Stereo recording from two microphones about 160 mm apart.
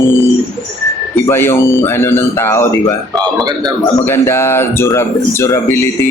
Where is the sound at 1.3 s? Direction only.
15° left (ahead or behind).